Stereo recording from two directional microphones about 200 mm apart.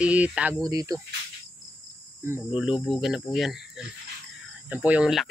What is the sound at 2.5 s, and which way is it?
Speech, 5° right (ahead or behind).